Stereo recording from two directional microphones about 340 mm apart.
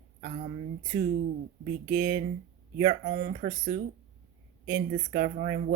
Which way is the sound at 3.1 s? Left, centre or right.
Right.